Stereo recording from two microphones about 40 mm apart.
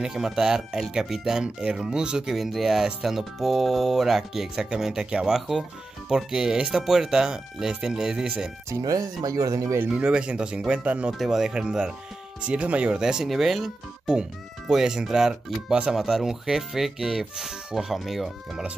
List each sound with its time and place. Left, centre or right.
0.0 s speech: centre
0.6 s speech: centre
1.4 s speech: right
2.3 s speech: centre
9.8 s speech: right
11.1 s speech: centre
11.5 s speech: right
13.0 s speech: centre
13.3 s speech: centre
16.0 s speech: centre